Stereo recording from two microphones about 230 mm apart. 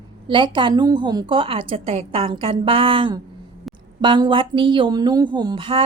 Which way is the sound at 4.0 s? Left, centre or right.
Right.